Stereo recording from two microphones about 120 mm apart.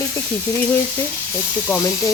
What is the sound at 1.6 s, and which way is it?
Speech, 20° left (ahead or behind).